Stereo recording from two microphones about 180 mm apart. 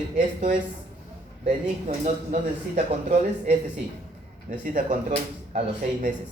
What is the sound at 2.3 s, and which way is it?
Speech, 40° right (ahead or behind).